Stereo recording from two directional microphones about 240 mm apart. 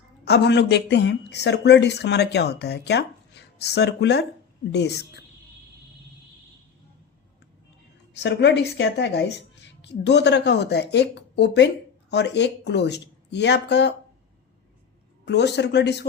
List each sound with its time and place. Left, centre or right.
0.3 s speech: left
8.2 s speech: left
15.2 s speech: left